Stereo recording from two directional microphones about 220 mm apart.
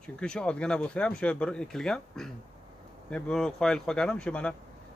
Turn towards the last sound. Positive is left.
turn(degrees=5)  # may be behind; listen again after turning